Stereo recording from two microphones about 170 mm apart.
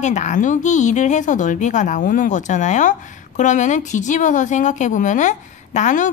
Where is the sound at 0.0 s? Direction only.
45° left (ahead or behind).